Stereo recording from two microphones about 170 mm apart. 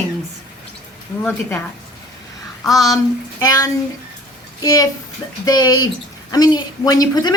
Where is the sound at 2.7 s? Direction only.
20° left (ahead or behind).